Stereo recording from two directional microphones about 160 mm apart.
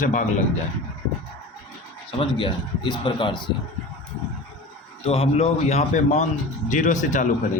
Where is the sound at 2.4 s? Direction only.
30° left (ahead or behind).